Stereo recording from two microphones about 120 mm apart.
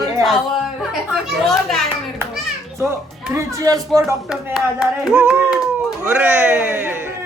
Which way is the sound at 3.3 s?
25° right (ahead or behind).